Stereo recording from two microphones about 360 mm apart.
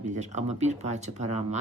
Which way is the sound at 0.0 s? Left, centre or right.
Centre.